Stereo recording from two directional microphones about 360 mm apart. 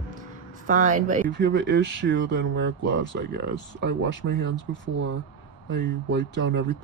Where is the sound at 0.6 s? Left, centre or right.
Right.